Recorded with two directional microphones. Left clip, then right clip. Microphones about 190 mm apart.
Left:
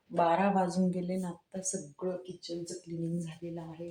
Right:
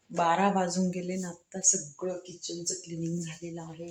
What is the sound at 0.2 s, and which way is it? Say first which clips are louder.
Speech: right 2 dB; 5° right (ahead or behind).